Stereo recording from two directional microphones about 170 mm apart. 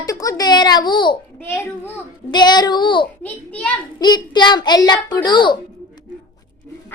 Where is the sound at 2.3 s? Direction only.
25° left (ahead or behind).